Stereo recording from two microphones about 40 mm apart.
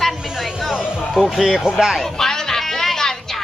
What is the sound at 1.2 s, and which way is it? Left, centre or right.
Speech, centre.